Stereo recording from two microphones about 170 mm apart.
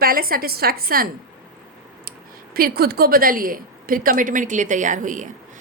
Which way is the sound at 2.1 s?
60° right (ahead or behind).